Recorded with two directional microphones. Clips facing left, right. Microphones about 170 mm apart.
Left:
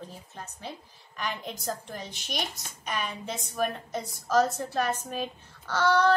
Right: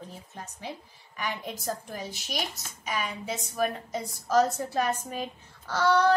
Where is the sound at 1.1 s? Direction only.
5° right (ahead or behind).